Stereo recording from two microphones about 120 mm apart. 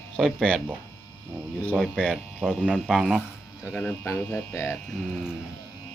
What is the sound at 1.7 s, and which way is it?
Speech, 5° left (ahead or behind).